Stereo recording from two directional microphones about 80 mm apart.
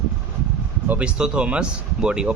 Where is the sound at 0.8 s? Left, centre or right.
Centre.